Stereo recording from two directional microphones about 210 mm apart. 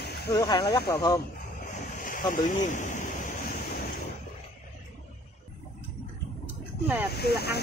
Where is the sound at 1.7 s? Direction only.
40° left (ahead or behind).